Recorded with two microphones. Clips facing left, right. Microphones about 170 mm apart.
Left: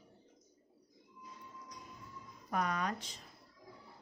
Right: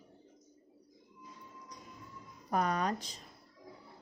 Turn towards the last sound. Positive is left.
turn(degrees=-35)  # may be behind; listen again after turning